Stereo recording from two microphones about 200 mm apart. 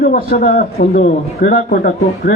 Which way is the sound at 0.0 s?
45° left (ahead or behind).